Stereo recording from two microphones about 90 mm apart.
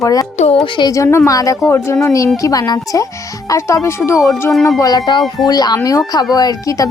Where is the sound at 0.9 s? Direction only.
35° left (ahead or behind).